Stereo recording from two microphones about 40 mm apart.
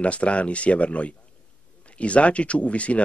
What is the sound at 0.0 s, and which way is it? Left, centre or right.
Speech, left.